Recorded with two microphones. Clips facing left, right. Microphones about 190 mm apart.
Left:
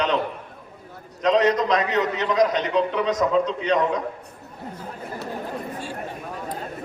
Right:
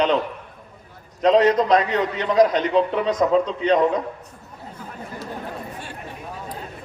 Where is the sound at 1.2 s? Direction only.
30° right (ahead or behind).